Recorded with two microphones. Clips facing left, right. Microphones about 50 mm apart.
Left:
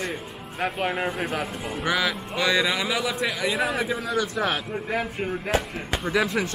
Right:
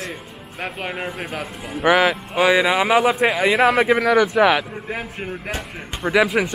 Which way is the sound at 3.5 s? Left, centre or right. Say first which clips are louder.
Right 9 dB; right.